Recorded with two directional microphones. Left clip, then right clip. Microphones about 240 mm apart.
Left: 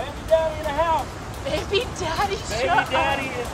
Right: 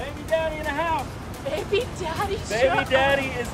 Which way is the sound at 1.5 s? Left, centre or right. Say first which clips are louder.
Left 1 dB; centre.